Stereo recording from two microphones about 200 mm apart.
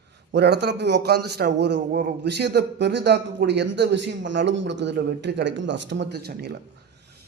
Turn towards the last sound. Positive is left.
turn(degrees=-55)  # may be behind; listen again after turning